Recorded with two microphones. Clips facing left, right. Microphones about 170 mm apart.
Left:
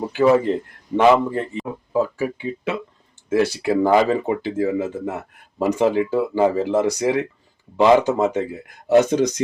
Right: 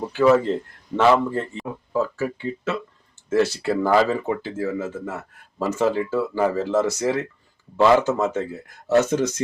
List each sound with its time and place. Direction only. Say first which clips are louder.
0.5 s speech: left 3 dB; 15° left (ahead or behind)